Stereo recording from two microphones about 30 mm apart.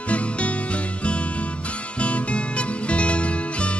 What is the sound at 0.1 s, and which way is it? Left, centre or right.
Music, left.